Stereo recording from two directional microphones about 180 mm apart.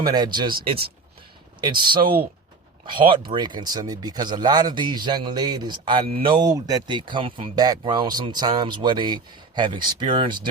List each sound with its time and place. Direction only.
0.0 s speech: 25° right (ahead or behind)
1.6 s speech: 25° right (ahead or behind)